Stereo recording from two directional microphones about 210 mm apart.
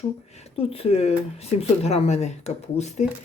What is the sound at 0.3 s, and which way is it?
Speech, 30° left (ahead or behind).